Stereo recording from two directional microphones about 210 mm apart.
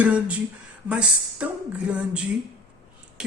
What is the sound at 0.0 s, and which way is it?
Speech, 5° right (ahead or behind).